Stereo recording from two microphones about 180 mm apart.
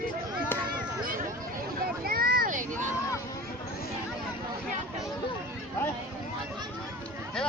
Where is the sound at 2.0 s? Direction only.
55° right (ahead or behind).